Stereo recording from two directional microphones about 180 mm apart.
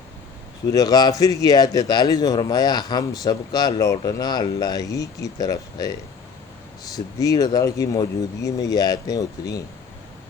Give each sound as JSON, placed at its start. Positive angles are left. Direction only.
{"t": 0.7, "sound": "speech", "side_deg": 20}